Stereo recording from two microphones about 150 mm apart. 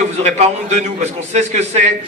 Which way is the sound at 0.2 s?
45° right (ahead or behind).